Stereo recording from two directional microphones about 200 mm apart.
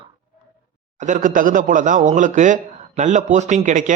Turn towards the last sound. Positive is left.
turn(degrees=-40)  # may be behind; listen again after turning